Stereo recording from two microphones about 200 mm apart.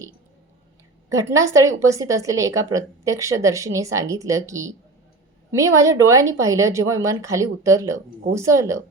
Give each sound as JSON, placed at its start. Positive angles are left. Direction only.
{"t": 1.3, "sound": "a woman's voice", "side_deg": -15}